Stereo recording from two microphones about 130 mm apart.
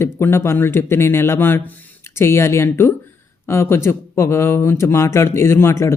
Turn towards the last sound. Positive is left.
turn(degrees=20)  # may be behind; listen again after turning